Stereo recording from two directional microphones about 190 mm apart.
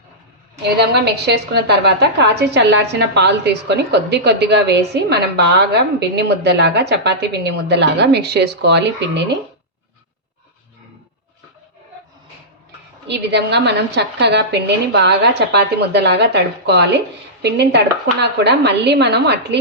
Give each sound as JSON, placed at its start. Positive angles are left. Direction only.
{"t": 0.8, "sound": "a woman's voice", "side_deg": -60}
{"t": 13.1, "sound": "a woman's voice", "side_deg": -65}